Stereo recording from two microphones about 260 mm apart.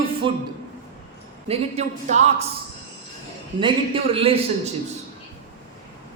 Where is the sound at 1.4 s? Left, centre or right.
Right.